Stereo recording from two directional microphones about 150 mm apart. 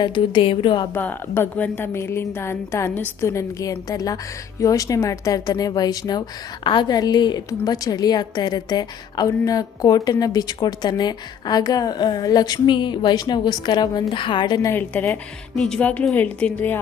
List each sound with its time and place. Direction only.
0.0 s speech: 30° left (ahead or behind)
0.9 s a woman's voice: 15° left (ahead or behind)
14.7 s a woman's voice: 15° left (ahead or behind)